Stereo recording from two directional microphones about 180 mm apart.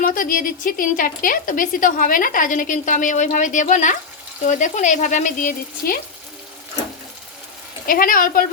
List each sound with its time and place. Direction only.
0.0 s a woman's voice: 50° left (ahead or behind)
7.9 s a woman's voice: 50° left (ahead or behind)